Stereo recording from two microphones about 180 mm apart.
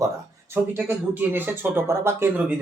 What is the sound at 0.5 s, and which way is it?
Speech, 10° right (ahead or behind).